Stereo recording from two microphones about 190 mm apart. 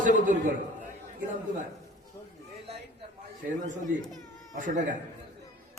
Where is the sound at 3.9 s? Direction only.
45° right (ahead or behind).